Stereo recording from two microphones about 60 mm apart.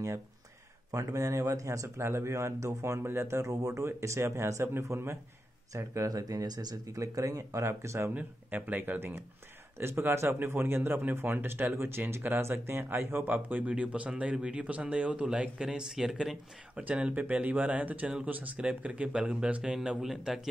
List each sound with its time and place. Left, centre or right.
0.9 s speech: right
6.0 s speech: right
8.1 s speech: right; by 16.8 s centre
16.8 s speech: right; by 20.3 s centre